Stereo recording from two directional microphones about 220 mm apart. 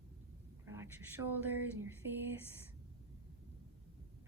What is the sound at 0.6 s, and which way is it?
A woman's voice, 10° right (ahead or behind).